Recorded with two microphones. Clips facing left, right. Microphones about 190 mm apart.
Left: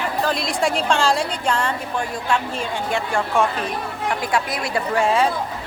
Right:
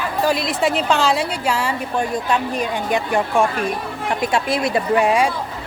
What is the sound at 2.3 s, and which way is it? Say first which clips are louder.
A woman's voice: right 3 dB; 20° right (ahead or behind).